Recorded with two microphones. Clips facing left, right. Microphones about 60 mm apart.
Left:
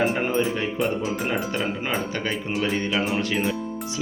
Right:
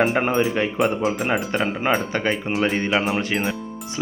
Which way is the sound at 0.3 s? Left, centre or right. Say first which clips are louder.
Right 3 dB; right.